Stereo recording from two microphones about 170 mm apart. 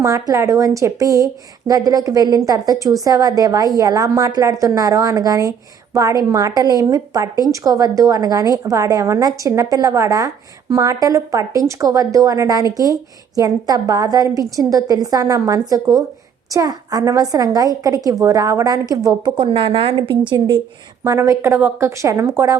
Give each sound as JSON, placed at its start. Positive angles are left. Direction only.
{"t": 0.0, "sound": "a woman's voice", "side_deg": -20}
{"t": 21.0, "sound": "speech", "side_deg": -15}